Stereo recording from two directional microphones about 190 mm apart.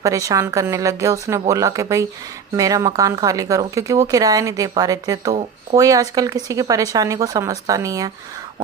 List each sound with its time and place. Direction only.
0.0 s speech: 15° right (ahead or behind)